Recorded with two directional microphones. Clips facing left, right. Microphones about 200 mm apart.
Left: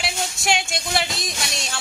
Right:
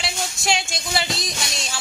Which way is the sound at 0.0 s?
Centre (ahead or behind).